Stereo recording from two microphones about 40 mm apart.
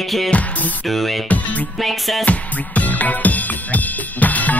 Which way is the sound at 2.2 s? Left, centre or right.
Left.